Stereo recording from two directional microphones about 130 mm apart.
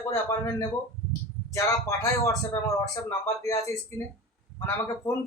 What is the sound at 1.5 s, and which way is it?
Speech, 20° left (ahead or behind).